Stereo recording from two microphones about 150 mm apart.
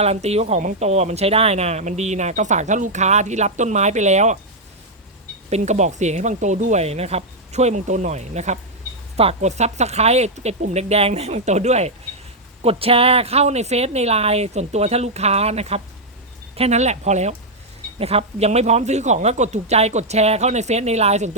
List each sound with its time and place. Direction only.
0.0 s a woman's voice: 45° right (ahead or behind)
5.5 s a woman's voice: 50° right (ahead or behind)